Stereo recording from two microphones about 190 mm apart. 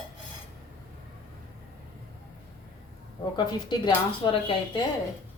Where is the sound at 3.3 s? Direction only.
25° left (ahead or behind).